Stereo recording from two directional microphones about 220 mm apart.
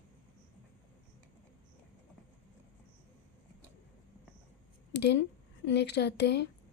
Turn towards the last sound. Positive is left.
turn(degrees=50)  # may be behind; listen again after turning